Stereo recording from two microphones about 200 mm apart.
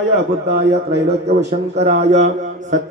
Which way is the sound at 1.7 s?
35° right (ahead or behind).